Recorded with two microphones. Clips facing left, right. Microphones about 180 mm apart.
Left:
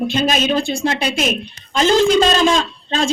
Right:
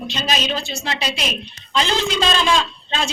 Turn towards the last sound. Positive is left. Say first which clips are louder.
# left 5 dB
turn(degrees=45)  # may be behind; listen again after turning